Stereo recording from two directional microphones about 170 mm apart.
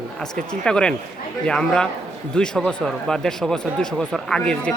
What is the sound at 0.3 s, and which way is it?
Speech, 5° left (ahead or behind).